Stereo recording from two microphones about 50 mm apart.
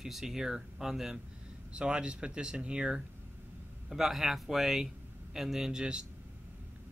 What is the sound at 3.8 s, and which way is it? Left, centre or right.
Speech, centre.